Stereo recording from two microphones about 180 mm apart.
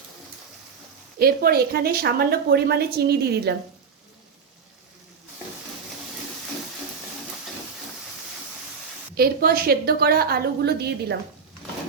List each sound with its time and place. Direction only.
1.2 s a woman's voice: 60° right (ahead or behind)
9.1 s a woman's voice: 55° right (ahead or behind)